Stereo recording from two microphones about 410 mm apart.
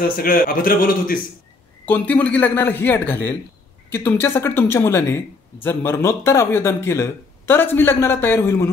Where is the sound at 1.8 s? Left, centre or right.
Centre.